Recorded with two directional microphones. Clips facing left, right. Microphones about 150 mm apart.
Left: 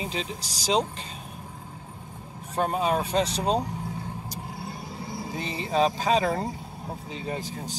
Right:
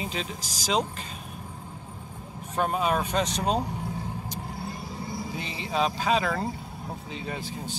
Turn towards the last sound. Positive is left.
turn(degrees=40)  # may be behind; listen again after turning